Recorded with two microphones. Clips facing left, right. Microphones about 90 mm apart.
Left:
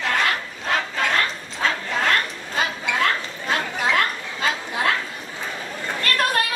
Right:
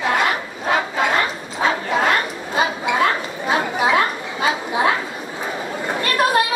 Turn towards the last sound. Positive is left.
turn(degrees=-15)  # may be behind; listen again after turning